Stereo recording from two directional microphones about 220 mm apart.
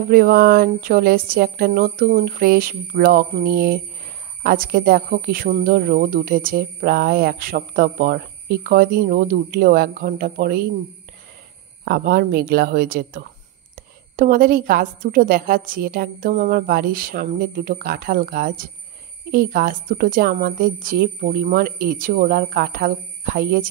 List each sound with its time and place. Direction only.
0.1 s speech: 45° right (ahead or behind)
11.8 s speech: 40° right (ahead or behind)